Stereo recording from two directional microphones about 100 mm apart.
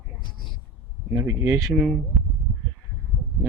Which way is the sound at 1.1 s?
30° right (ahead or behind).